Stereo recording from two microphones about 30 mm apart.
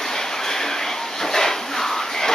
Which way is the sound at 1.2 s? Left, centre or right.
Centre.